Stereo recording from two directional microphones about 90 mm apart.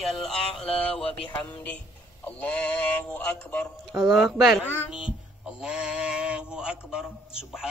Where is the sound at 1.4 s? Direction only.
15° left (ahead or behind).